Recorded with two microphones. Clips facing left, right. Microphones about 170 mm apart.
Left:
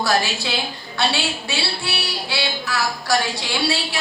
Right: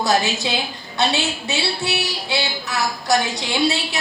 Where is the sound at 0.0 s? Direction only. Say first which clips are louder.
Right 2 dB; 20° right (ahead or behind).